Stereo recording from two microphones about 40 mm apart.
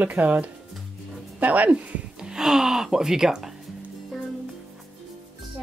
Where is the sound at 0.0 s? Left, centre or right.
Right.